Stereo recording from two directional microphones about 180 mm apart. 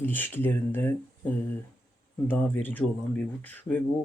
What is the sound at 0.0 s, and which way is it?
Speech, 10° left (ahead or behind).